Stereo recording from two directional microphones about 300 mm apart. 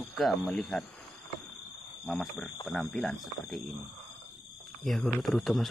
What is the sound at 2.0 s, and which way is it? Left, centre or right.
Speech, centre.